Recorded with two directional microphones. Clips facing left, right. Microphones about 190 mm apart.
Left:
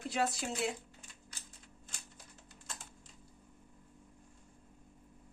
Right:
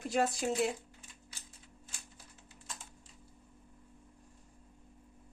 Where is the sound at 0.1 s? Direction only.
45° right (ahead or behind).